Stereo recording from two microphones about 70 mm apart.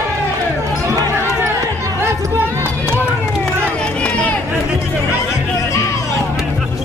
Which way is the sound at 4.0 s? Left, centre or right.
Centre.